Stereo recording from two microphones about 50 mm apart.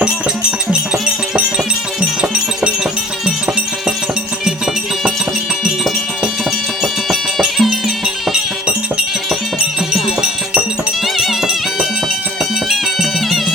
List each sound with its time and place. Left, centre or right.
0.7 s music: centre
6.8 s music: centre
9.9 s music: centre
11.0 s music: centre